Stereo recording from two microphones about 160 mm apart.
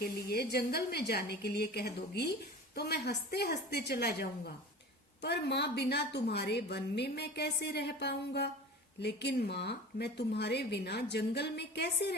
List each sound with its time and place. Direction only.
0.0 s a woman's voice: 80° left